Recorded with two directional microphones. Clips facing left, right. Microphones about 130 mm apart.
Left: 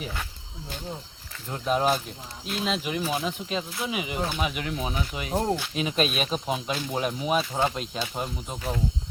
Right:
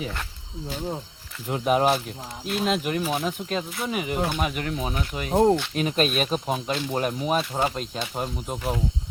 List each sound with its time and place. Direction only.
1.5 s speech: 15° right (ahead or behind)
5.3 s speech: 20° right (ahead or behind)
6.0 s speech: centre (ahead or behind)